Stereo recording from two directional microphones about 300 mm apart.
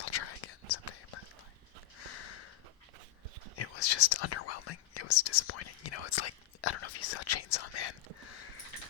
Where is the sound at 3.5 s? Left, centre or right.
Left.